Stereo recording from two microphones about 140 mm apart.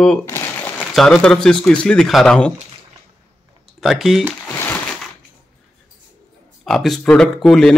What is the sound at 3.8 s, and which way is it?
Speech, centre (ahead or behind).